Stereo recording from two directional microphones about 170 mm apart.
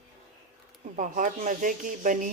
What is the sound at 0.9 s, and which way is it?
A woman's voice, 50° right (ahead or behind).